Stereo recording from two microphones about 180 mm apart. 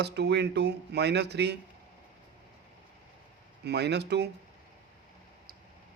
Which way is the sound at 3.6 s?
70° right (ahead or behind).